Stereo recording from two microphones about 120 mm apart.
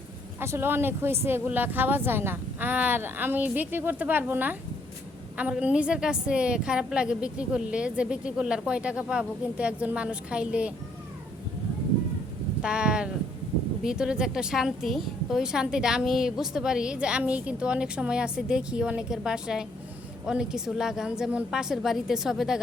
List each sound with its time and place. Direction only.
0.3 s a woman's voice: 20° right (ahead or behind)
12.6 s a woman's voice: 10° right (ahead or behind)